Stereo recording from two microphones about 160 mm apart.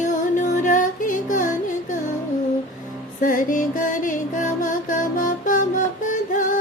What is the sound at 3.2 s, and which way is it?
Music, 55° left (ahead or behind).